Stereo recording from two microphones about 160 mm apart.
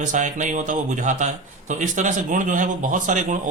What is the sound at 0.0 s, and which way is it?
Speech, 50° right (ahead or behind).